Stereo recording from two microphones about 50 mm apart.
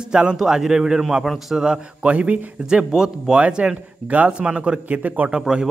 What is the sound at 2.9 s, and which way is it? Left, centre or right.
Speech, centre.